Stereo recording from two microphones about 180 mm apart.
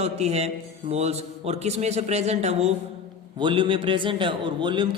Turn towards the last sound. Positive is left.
turn(degrees=-25)  # may be behind; listen again after turning